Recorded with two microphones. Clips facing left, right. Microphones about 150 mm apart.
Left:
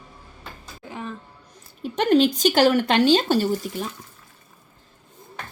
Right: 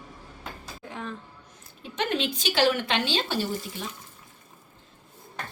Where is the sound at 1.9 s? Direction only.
40° left (ahead or behind).